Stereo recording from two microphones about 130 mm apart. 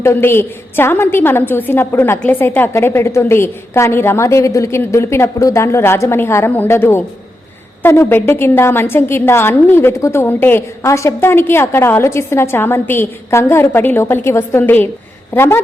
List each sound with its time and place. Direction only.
0.0 s a woman's voice: 20° left (ahead or behind)